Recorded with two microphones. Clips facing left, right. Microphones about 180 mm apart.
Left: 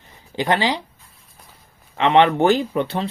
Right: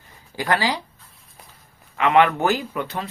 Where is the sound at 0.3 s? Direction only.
25° left (ahead or behind).